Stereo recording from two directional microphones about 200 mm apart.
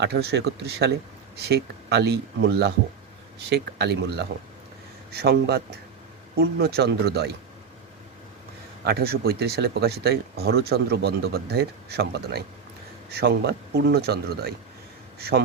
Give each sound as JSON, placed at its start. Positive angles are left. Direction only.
{"t": 0.0, "sound": "speech", "side_deg": -55}
{"t": 8.8, "sound": "speech", "side_deg": -55}